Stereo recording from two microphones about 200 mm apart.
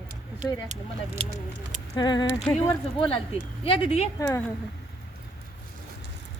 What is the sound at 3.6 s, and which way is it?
Speech, 30° left (ahead or behind).